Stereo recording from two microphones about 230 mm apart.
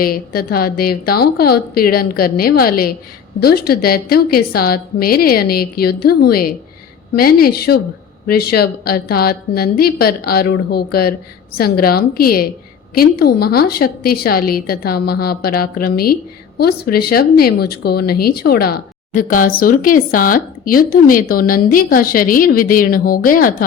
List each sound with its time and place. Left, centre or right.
0.0 s speech: left